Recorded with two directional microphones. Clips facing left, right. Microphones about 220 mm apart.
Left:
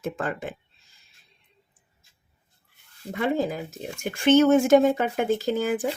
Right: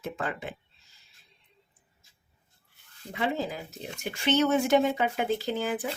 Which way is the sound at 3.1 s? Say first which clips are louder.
Left 5 dB; 50° left (ahead or behind).